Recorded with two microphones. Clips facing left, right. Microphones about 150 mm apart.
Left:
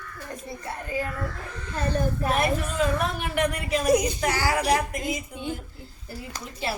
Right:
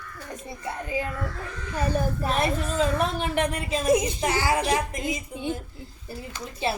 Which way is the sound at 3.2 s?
25° right (ahead or behind).